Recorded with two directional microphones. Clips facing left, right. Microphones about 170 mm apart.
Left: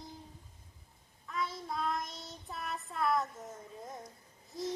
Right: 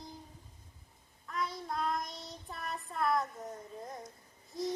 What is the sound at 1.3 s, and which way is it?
Child singing, centre (ahead or behind).